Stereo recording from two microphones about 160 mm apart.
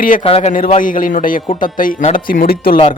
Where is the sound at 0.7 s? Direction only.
55° left (ahead or behind).